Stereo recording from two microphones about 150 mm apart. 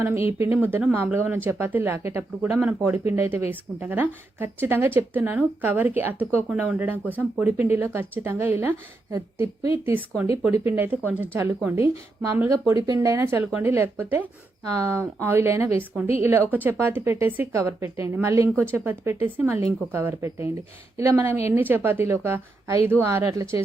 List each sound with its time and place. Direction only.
0.0 s speech: 15° right (ahead or behind)
12.7 s speech: 25° right (ahead or behind)